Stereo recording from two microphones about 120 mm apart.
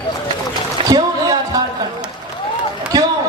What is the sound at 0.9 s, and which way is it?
Music, 35° right (ahead or behind).